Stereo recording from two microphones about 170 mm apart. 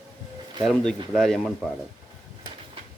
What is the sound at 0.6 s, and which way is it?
Speech, centre (ahead or behind).